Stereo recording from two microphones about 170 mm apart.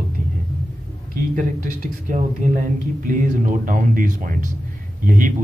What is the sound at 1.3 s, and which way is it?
Speech, 50° right (ahead or behind).